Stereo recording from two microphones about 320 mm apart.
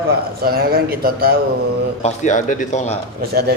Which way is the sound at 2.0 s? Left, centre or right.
Left.